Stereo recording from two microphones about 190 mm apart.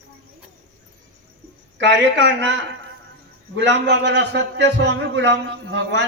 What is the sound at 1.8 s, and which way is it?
A man's voice, 65° right (ahead or behind).